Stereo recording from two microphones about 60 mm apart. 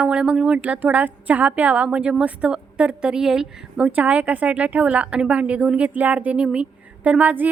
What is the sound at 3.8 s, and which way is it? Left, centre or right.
A woman's voice, right.